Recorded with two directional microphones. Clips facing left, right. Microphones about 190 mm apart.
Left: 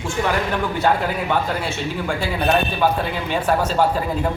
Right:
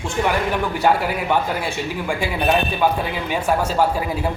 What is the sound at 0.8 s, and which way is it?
Speech, 10° right (ahead or behind).